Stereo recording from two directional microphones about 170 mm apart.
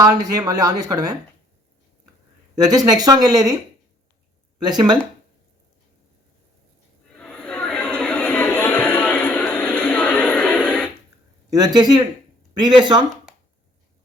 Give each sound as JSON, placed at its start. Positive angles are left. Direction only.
{"t": 0.0, "sound": "speech", "side_deg": -20}
{"t": 2.6, "sound": "speech", "side_deg": -20}
{"t": 4.6, "sound": "speech", "side_deg": -25}
{"t": 7.2, "sound": "a sound", "side_deg": 5}
{"t": 11.5, "sound": "speech", "side_deg": -25}